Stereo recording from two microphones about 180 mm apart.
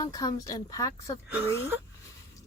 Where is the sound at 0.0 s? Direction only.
20° left (ahead or behind).